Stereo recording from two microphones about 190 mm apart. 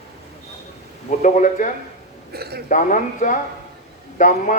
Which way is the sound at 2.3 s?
55° right (ahead or behind).